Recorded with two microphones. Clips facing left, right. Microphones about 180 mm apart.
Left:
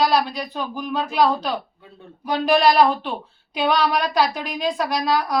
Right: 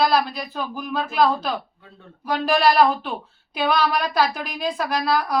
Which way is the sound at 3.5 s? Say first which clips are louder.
Left 1 dB; 5° right (ahead or behind).